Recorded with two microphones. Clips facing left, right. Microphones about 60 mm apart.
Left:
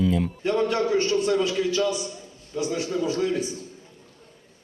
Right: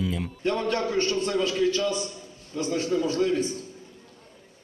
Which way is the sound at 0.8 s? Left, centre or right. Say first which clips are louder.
Left 3 dB; centre.